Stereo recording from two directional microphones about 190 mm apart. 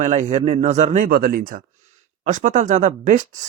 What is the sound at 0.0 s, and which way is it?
Speech, 40° right (ahead or behind).